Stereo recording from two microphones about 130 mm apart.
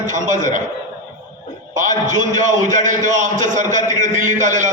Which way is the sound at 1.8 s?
75° right (ahead or behind).